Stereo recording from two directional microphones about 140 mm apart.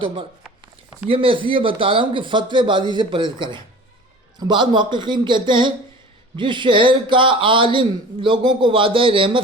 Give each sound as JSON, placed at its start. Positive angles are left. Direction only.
{"t": 1.0, "sound": "speech", "side_deg": -40}